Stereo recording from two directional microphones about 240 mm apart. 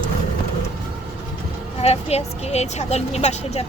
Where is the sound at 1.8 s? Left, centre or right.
Left.